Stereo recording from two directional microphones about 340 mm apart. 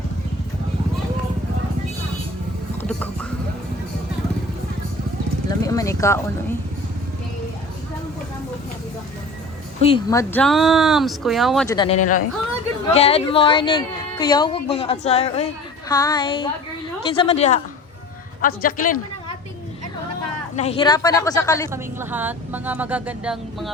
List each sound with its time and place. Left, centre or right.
2.8 s a sound: centre
5.5 s a sound: centre
9.8 s speech: centre
11.8 s a man's voice: centre
20.6 s a woman's voice: centre
21.7 s speech: centre